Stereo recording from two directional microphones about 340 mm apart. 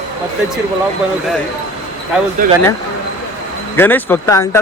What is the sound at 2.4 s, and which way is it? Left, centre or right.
Speech, right.